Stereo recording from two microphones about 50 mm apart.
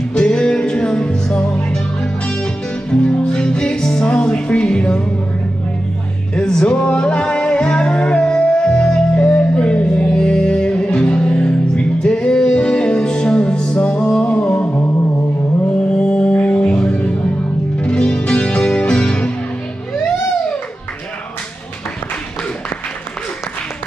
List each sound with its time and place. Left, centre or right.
0.1 s music: centre
6.3 s music: centre
14.6 s music: left
15.9 s music: left